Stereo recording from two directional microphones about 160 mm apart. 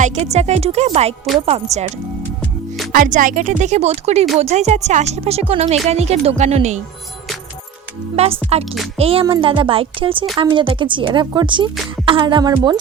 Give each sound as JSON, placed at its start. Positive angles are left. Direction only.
{"t": 0.0, "sound": "speech", "side_deg": -45}
{"t": 1.3, "sound": "speech", "side_deg": 0}
{"t": 1.7, "sound": "speech", "side_deg": -45}
{"t": 2.9, "sound": "speech", "side_deg": -55}
{"t": 8.1, "sound": "speech", "side_deg": -40}